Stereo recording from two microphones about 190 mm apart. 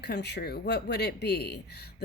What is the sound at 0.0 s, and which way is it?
Speech, 60° left (ahead or behind).